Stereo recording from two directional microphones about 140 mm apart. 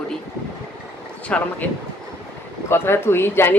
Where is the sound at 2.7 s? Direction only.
15° left (ahead or behind).